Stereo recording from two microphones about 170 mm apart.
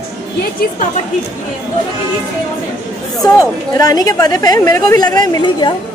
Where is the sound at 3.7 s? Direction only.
20° left (ahead or behind).